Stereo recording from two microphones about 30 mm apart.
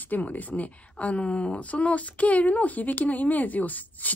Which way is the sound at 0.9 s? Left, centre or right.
Left.